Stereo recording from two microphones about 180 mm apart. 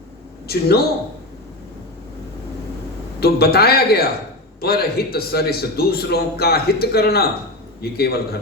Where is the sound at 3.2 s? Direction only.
60° left (ahead or behind).